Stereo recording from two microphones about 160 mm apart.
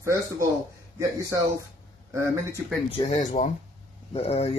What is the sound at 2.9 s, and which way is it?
Speech, 35° left (ahead or behind).